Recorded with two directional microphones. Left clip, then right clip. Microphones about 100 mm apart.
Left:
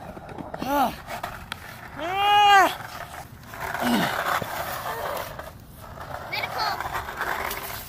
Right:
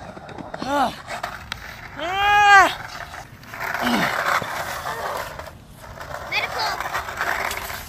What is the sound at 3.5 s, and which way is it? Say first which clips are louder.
Dog: right 3 dB; 35° right (ahead or behind).